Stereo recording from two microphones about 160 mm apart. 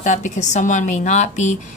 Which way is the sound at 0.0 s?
50° left (ahead or behind).